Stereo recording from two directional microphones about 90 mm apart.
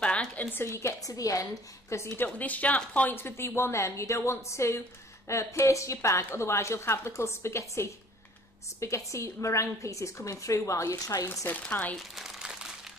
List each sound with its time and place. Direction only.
0.0 s a woman's voice: 10° left (ahead or behind); by 1.4 s 40° left (ahead or behind)
2.1 s a woman's voice: 20° left (ahead or behind); by 11.3 s 35° left (ahead or behind)
11.4 s chopping: 15° left (ahead or behind)
11.9 s crumpling: centre (ahead or behind)